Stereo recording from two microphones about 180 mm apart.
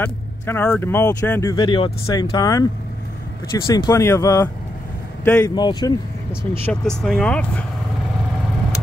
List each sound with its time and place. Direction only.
0.0 s speech: 10° left (ahead or behind)
1.6 s speech: 25° left (ahead or behind); by 5.5 s 10° left (ahead or behind)
5.5 s speech: 25° left (ahead or behind)
6.6 s speech: 5° left (ahead or behind)